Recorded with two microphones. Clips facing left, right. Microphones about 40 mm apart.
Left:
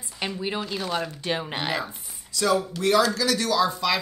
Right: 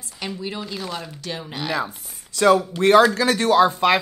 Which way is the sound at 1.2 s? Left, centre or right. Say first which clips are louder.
Left 2 dB; left.